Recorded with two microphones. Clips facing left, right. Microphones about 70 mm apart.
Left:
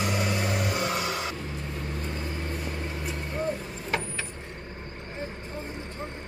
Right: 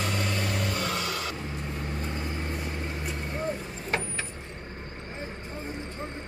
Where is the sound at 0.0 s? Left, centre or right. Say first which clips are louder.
Left 2 dB; centre.